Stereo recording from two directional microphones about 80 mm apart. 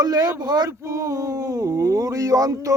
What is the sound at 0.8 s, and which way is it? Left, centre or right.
Speech, right.